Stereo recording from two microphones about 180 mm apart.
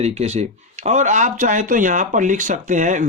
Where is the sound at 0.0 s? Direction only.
35° right (ahead or behind).